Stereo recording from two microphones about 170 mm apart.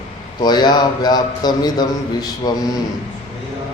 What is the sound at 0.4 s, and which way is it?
A man's voice, 25° left (ahead or behind).